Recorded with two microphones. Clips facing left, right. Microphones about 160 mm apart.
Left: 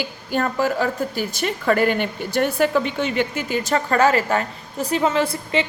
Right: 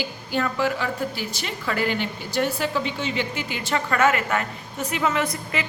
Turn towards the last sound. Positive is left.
turn(degrees=30)  # may be behind; listen again after turning